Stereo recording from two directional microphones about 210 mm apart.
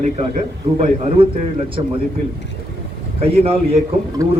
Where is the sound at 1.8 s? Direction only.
25° right (ahead or behind).